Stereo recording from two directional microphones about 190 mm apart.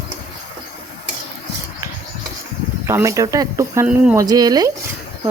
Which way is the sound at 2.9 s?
15° right (ahead or behind).